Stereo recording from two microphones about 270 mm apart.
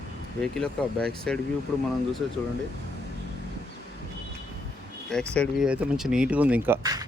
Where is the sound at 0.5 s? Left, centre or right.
Centre.